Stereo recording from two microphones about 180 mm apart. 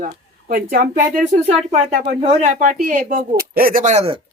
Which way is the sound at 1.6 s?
35° right (ahead or behind).